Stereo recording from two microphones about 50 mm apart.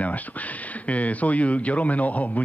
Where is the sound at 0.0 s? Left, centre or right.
Left.